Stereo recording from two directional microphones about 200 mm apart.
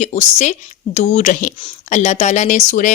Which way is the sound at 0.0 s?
35° left (ahead or behind).